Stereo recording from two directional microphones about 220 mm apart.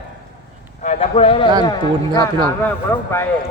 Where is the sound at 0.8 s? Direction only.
30° left (ahead or behind).